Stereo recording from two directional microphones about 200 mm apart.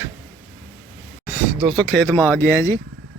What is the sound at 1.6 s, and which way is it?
Speech, 5° left (ahead or behind).